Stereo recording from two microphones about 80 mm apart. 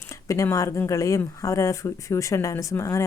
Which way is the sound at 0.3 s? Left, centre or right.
Left.